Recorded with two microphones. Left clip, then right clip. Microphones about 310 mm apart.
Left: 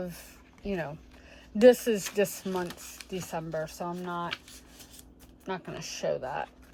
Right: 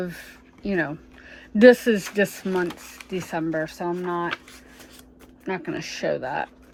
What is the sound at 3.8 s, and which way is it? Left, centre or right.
Speech, right.